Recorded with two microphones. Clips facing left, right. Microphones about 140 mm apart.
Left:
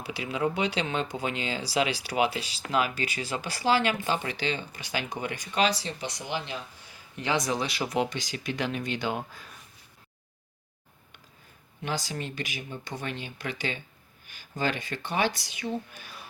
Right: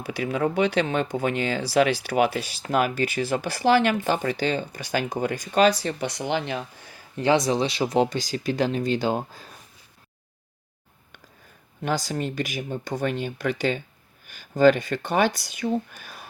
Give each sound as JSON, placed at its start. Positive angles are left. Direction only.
{"t": 0.0, "sound": "speech", "side_deg": -50}
{"t": 7.2, "sound": "speech", "side_deg": -30}
{"t": 11.8, "sound": "speech", "side_deg": -45}